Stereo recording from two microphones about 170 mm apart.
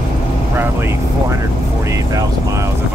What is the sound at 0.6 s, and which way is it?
Speech, 15° right (ahead or behind).